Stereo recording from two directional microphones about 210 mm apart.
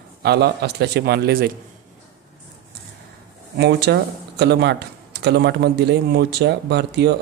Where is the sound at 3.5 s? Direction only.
50° right (ahead or behind).